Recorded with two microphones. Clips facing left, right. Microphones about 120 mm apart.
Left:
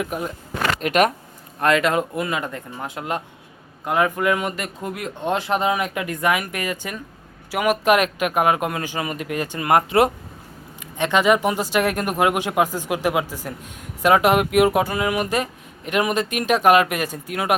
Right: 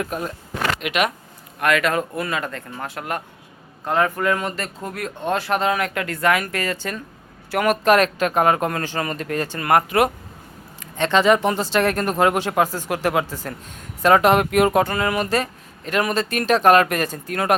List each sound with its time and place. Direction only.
0.0 s speech: 15° left (ahead or behind)
0.8 s speech: 40° left (ahead or behind)
1.5 s speech: 25° left (ahead or behind); by 17.5 s 10° left (ahead or behind)